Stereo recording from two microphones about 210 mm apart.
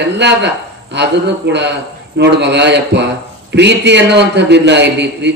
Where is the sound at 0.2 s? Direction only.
55° right (ahead or behind).